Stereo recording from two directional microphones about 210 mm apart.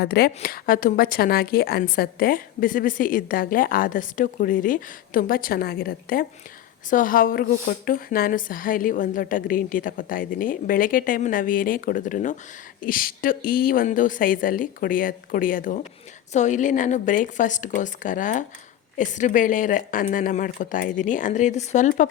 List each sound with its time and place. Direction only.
0.0 s a woman's voice: 50° left (ahead or behind)